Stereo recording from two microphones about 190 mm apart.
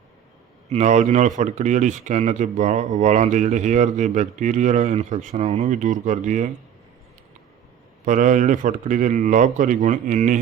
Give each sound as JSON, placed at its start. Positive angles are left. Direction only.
{"t": 0.7, "sound": "speech", "side_deg": -35}
{"t": 8.0, "sound": "a man's voice", "side_deg": -40}